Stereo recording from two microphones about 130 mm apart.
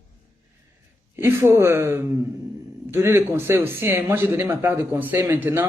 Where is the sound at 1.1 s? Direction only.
20° right (ahead or behind).